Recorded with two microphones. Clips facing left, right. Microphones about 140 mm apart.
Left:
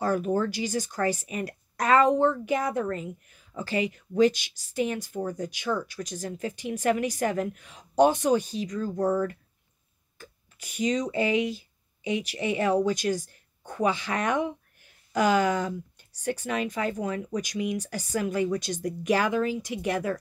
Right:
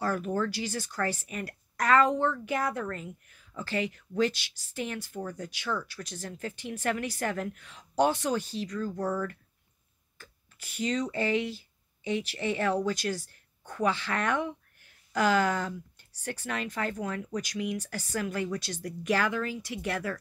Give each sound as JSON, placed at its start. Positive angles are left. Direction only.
{"t": 0.0, "sound": "speech", "side_deg": 15}